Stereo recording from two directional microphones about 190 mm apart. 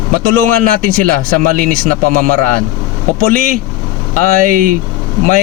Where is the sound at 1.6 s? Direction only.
45° right (ahead or behind).